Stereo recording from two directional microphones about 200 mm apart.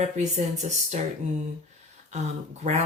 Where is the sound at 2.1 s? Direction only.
35° right (ahead or behind).